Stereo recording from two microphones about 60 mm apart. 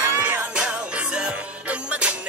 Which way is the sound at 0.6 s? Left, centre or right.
Centre.